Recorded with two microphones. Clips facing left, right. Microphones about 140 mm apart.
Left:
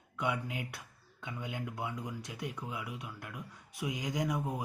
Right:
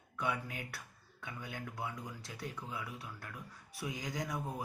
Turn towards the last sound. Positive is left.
turn(degrees=15)  # may be behind; listen again after turning